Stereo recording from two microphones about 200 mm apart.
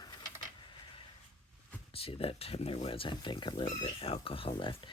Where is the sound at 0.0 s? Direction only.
20° left (ahead or behind).